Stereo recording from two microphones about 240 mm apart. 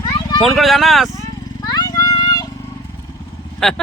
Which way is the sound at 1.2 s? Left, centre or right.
Centre.